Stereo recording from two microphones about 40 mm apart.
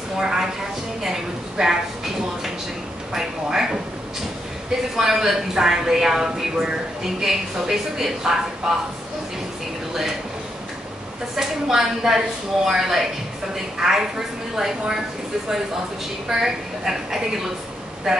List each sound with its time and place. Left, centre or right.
0.2 s a woman's voice: centre
3.4 s a woman's voice: centre
4.9 s a woman's voice: centre
11.3 s a woman's voice: centre
16.3 s a woman's voice: centre